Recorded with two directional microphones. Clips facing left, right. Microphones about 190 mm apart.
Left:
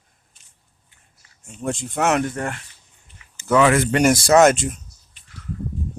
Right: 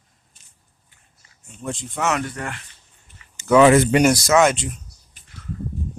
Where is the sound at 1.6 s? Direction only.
40° left (ahead or behind).